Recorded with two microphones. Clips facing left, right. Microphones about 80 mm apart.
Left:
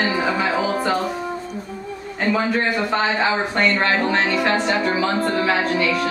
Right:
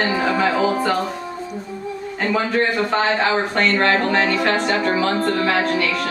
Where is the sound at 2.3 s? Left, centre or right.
Centre.